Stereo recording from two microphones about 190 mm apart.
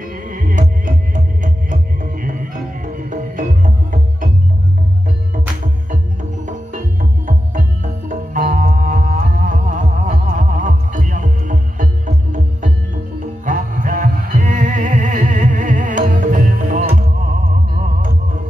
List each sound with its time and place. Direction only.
0.3 s music: 45° right (ahead or behind)
6.4 s music: 45° right (ahead or behind)